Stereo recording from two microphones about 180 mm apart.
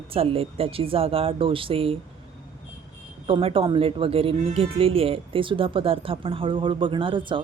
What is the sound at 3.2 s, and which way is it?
Speech, 30° right (ahead or behind).